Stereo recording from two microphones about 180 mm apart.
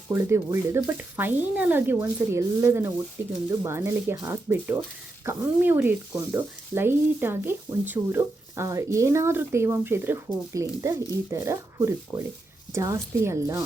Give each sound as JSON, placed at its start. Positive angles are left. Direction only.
{"t": 0.1, "sound": "speech", "side_deg": -15}